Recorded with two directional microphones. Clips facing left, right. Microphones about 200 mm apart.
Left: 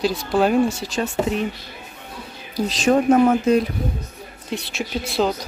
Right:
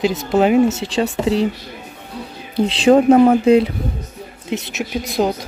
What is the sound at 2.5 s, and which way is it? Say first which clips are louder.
Speech: right 6 dB; 30° right (ahead or behind).